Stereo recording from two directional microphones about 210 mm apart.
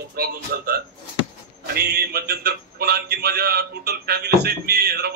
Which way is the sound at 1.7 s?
50° right (ahead or behind).